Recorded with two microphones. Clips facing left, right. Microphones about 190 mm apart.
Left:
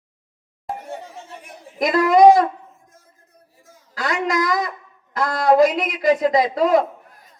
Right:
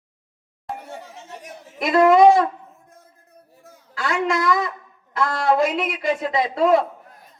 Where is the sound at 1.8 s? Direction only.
40° left (ahead or behind).